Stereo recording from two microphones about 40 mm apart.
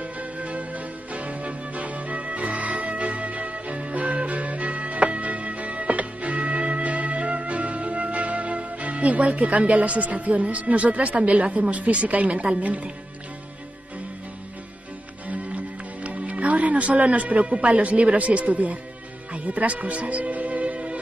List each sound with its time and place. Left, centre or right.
0.0 s music: right
12.5 s speech: right
15.2 s music: right